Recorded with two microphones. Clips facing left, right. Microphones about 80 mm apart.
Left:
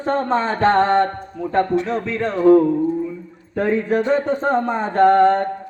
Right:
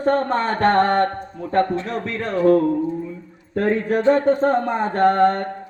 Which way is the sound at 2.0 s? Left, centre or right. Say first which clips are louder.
Left 4 dB; centre.